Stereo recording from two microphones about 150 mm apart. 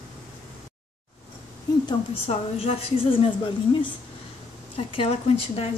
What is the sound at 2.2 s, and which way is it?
A woman's voice, 40° left (ahead or behind).